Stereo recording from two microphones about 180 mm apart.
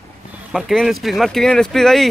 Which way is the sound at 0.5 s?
Centre (ahead or behind).